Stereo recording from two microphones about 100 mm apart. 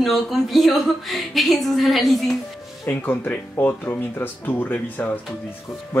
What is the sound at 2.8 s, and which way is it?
A man's voice, 20° left (ahead or behind).